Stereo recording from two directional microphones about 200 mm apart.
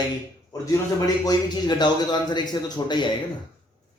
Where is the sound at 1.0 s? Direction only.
20° left (ahead or behind).